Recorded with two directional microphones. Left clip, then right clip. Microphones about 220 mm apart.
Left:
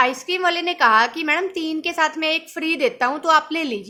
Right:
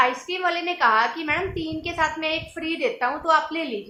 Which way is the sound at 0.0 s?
45° left (ahead or behind).